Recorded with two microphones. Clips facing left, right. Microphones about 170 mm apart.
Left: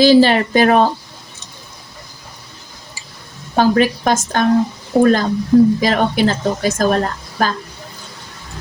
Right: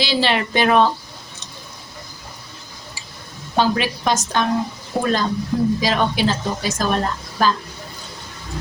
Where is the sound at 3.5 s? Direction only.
50° left (ahead or behind).